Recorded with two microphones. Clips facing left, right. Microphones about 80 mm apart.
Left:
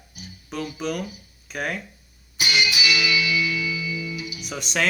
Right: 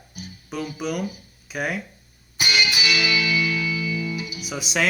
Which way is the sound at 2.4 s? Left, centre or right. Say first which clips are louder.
Right 1 dB; right.